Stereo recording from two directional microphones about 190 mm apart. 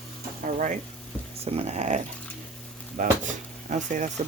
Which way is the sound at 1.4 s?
30° right (ahead or behind).